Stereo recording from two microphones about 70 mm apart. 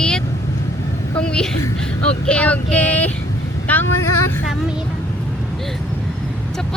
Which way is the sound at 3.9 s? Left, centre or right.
Left.